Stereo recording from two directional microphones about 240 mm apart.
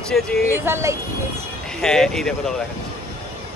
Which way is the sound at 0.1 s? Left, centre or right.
Centre.